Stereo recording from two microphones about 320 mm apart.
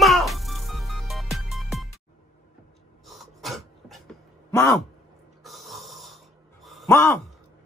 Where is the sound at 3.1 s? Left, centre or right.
Centre.